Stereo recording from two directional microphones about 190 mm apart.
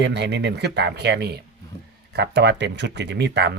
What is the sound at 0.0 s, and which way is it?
A man's voice, 65° right (ahead or behind).